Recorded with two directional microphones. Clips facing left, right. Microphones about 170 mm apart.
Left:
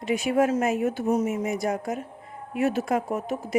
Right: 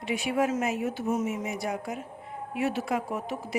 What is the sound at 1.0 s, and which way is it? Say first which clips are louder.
A woman's voice: left 4 dB; 40° left (ahead or behind).